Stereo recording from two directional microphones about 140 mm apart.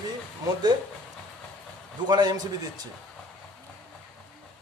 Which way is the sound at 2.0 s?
30° right (ahead or behind).